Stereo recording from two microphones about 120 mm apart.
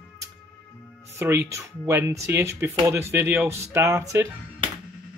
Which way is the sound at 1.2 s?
20° right (ahead or behind).